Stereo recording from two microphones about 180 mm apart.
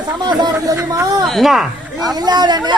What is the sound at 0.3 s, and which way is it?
Speech, 20° right (ahead or behind).